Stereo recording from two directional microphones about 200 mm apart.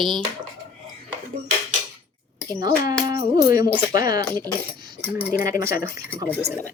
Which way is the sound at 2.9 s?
20° right (ahead or behind).